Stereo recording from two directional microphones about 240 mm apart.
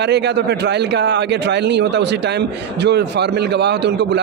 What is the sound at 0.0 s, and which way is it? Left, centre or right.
A man's voice, right.